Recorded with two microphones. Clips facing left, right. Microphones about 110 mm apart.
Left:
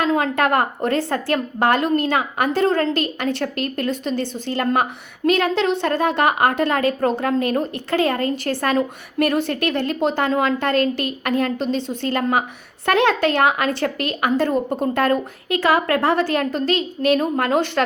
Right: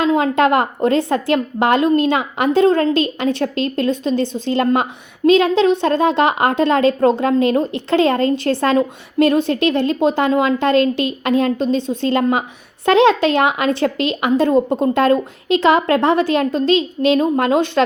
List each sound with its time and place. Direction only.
0.0 s a woman's voice: 20° right (ahead or behind)